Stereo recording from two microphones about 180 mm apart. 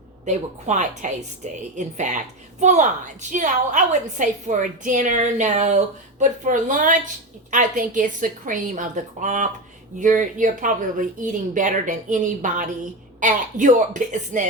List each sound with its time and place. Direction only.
0.3 s a woman's voice: 40° right (ahead or behind)